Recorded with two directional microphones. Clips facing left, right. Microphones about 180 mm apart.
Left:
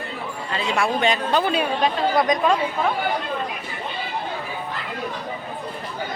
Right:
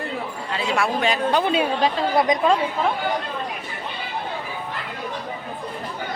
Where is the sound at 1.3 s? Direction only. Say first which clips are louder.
Right 1 dB; 20° right (ahead or behind).